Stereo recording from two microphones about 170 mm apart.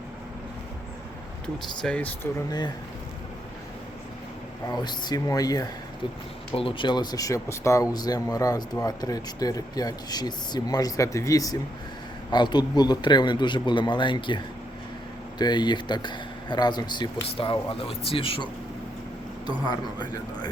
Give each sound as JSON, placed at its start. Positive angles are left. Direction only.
{"t": 1.8, "sound": "speech", "side_deg": 5}
{"t": 4.7, "sound": "speech", "side_deg": 25}
{"t": 19.6, "sound": "speech", "side_deg": 25}